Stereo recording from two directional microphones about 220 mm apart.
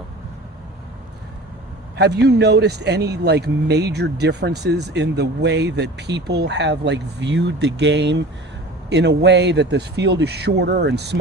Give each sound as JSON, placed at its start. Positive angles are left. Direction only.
{"t": 2.0, "sound": "speech", "side_deg": -50}